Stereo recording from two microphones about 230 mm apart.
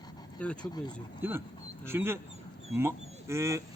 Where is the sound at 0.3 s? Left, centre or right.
Centre.